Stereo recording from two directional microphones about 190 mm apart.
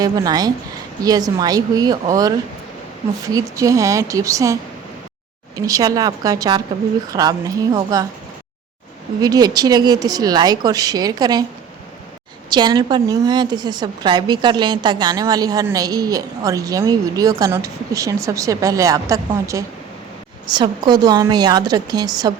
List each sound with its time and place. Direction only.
0.0 s a woman's voice: 20° right (ahead or behind)
5.5 s a woman's voice: 20° right (ahead or behind)
9.2 s a woman's voice: 20° right (ahead or behind)
12.5 s a woman's voice: 25° right (ahead or behind)